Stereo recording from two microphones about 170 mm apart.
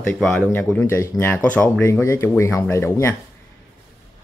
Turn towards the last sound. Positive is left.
turn(degrees=15)  # may be behind; listen again after turning